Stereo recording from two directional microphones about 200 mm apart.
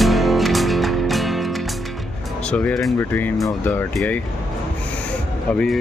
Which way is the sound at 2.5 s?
5° left (ahead or behind).